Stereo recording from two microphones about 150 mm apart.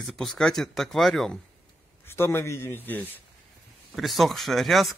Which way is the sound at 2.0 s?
15° left (ahead or behind).